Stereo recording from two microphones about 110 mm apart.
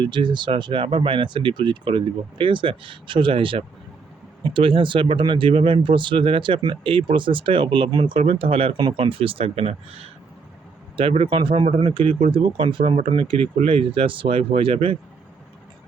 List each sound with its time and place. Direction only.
0.0 s speech: 45° right (ahead or behind); by 10.1 s 65° right (ahead or behind)
11.3 s speech: 50° right (ahead or behind)